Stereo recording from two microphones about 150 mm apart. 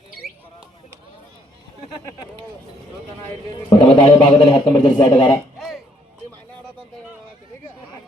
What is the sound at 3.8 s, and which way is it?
A man's voice, 30° left (ahead or behind).